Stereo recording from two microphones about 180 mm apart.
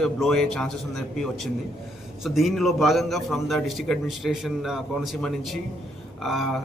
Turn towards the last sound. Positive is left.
turn(degrees=0)  # may be behind; listen again after turning